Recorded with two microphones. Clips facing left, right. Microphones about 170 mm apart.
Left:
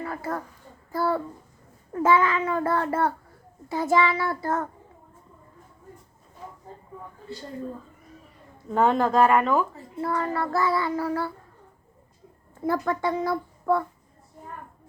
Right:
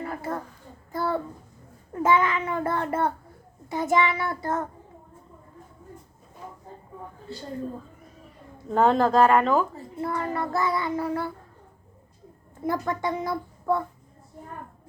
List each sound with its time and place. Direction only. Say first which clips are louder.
0.0 s a sound: even; 25° right (ahead or behind)
0.9 s a child's voice: left 2 dB; 20° right (ahead or behind)
2.0 s child singing: left 1 dB; 20° right (ahead or behind)
8.7 s speech: right 1 dB; 35° right (ahead or behind)
10.0 s child singing: left 2 dB; 20° right (ahead or behind)
12.6 s child singing: left 2 dB; 20° right (ahead or behind)